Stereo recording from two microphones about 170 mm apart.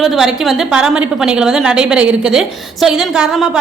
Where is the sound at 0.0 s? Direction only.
Centre (ahead or behind).